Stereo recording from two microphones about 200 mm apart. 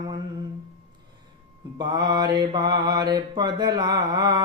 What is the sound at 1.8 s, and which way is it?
Mantra, 20° right (ahead or behind).